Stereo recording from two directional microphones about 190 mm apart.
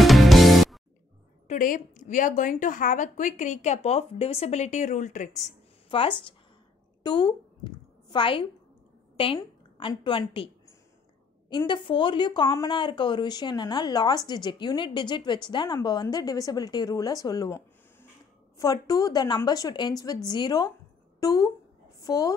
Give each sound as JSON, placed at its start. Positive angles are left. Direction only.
{"t": 0.0, "sound": "music", "side_deg": 0}
{"t": 1.5, "sound": "a woman's voice", "side_deg": 45}
{"t": 11.5, "sound": "a woman's voice", "side_deg": 25}